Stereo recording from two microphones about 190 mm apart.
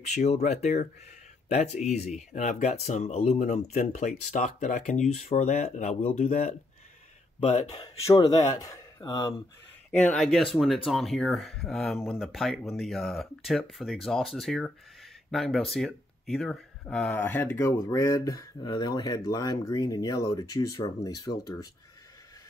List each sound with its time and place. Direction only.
0.0 s speech: 35° left (ahead or behind)
7.8 s speech: 25° left (ahead or behind)
9.8 s speech: 5° left (ahead or behind)